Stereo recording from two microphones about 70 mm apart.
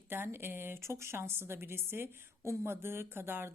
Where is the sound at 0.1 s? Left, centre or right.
Right.